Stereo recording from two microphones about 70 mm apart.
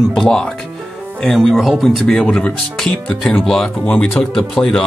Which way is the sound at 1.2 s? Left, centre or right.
Centre.